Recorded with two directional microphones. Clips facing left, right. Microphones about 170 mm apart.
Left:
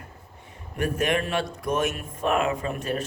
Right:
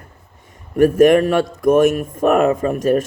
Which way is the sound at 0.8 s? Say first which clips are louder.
Right 14 dB; 45° right (ahead or behind).